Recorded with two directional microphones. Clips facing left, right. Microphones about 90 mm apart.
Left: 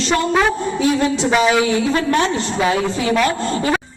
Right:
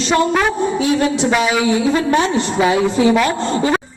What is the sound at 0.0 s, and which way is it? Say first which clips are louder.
A woman's voice: right 1 dB; 20° right (ahead or behind).